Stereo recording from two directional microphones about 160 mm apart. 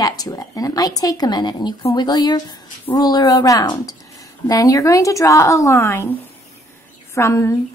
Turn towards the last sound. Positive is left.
turn(degrees=20)  # may be behind; listen again after turning